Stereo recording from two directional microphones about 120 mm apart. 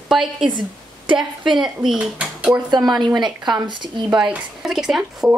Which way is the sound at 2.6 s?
35° right (ahead or behind).